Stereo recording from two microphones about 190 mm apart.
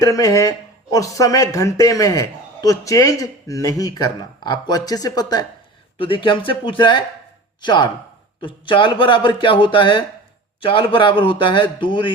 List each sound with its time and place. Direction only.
0.0 s a man's voice: 20° left (ahead or behind)